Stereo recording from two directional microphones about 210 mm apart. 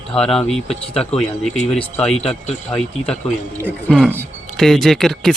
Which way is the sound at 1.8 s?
5° left (ahead or behind).